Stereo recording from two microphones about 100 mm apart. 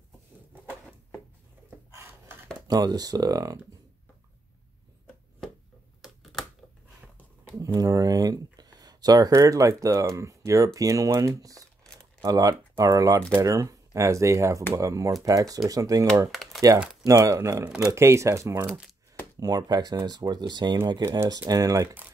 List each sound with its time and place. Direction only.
2.0 s a sound: 25° right (ahead or behind)
2.7 s speech: 40° right (ahead or behind)
6.3 s a sound: centre (ahead or behind)
7.6 s speech: 35° right (ahead or behind)
11.8 s crumpling: 5° left (ahead or behind)
12.3 s speech: 35° right (ahead or behind)
16.3 s typing: centre (ahead or behind)
17.0 s speech: 35° right (ahead or behind)
17.6 s speech: 5° right (ahead or behind)
17.9 s speech: 30° right (ahead or behind)
19.4 s speech: 40° right (ahead or behind)